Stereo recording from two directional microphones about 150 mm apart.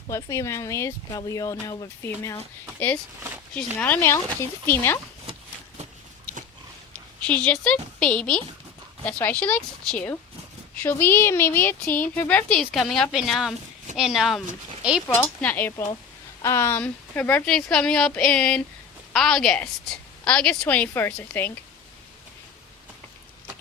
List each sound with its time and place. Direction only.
0.1 s speech: 20° left (ahead or behind)
3.5 s a woman's voice: 10° left (ahead or behind)
7.3 s a woman's voice: 10° left (ahead or behind)
15.0 s a woman's voice: 20° left (ahead or behind)